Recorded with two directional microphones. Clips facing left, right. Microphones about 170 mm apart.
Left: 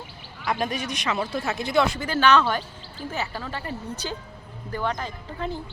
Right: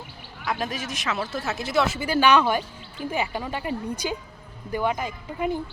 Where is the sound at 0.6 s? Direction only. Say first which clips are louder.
Left 2 dB; centre (ahead or behind).